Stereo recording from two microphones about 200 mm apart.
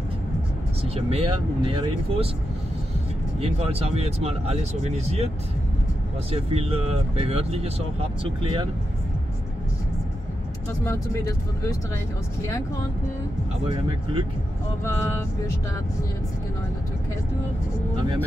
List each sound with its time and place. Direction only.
0.8 s speech: 30° right (ahead or behind)
3.3 s speech: 30° right (ahead or behind)
6.3 s speech: 30° right (ahead or behind)
10.8 s speech: 15° left (ahead or behind)
14.9 s speech: 10° left (ahead or behind)